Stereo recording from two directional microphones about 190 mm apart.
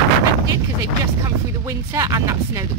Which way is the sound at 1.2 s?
15° right (ahead or behind).